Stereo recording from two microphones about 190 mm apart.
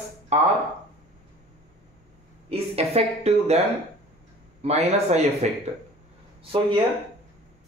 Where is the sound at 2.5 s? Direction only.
30° right (ahead or behind).